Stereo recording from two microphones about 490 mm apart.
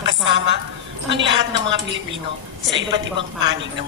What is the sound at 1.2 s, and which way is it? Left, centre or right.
A woman's voice, right.